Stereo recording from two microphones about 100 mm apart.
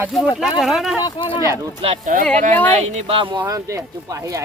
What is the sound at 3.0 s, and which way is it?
Speech, 60° right (ahead or behind).